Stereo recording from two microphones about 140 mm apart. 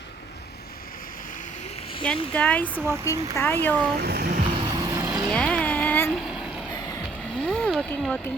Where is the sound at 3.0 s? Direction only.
20° left (ahead or behind).